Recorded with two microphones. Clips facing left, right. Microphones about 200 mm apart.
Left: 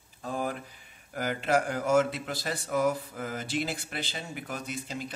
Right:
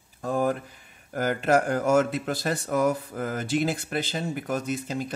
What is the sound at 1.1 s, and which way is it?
Speech, 50° right (ahead or behind).